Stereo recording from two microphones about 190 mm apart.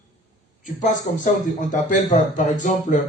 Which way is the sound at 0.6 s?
40° left (ahead or behind).